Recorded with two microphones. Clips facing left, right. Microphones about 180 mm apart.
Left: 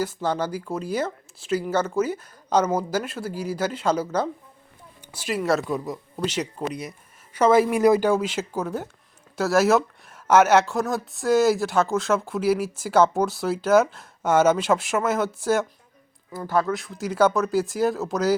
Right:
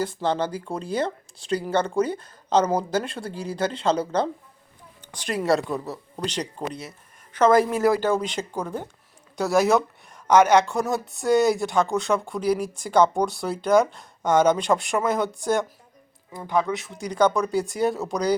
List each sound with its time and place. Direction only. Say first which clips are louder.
0.0 s speech: right 1 dB; 10° left (ahead or behind)
5.7 s speech: left 2 dB; 10° left (ahead or behind)
7.8 s speech: left 3 dB; 20° left (ahead or behind)
8.1 s speech: left 2 dB; 5° left (ahead or behind)
16.5 s speech: even; 15° right (ahead or behind)
16.7 s speech: left 1 dB; centre (ahead or behind)